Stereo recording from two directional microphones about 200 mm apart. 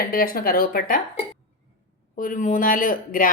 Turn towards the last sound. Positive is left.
turn(degrees=45)  # may be behind; listen again after turning